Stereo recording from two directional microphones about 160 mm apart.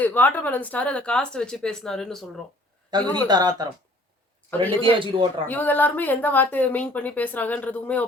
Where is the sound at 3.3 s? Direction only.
25° right (ahead or behind).